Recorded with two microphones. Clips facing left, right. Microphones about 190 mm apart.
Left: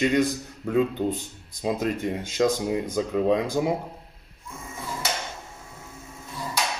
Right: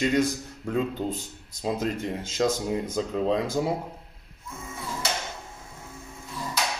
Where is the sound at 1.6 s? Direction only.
15° left (ahead or behind).